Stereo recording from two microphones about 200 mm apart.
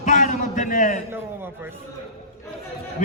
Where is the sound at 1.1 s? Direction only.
10° right (ahead or behind).